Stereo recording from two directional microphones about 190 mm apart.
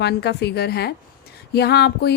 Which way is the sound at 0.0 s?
60° left (ahead or behind).